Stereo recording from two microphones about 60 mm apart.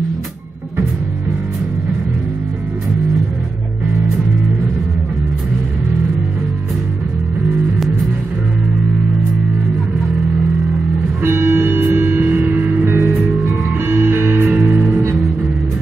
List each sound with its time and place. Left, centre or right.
11.2 s music: right